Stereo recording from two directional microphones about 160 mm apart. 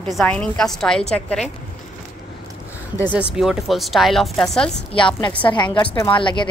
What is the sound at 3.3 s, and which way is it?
Speech, centre (ahead or behind).